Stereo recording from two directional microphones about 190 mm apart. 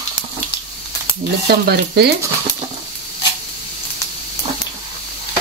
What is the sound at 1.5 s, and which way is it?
Speech, 60° right (ahead or behind).